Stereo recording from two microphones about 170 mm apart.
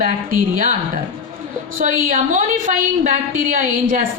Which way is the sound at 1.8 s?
45° right (ahead or behind).